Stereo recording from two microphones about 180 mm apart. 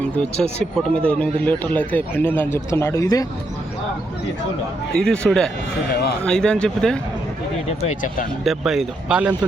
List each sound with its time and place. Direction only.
0.0 s speech: 5° left (ahead or behind)
4.9 s speech: 5° left (ahead or behind)
7.9 s speech: 45° left (ahead or behind)
8.4 s speech: centre (ahead or behind)